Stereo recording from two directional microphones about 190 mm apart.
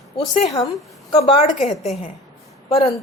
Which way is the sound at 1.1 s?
30° left (ahead or behind).